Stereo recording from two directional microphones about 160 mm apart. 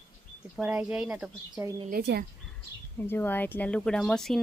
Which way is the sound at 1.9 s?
75° right (ahead or behind).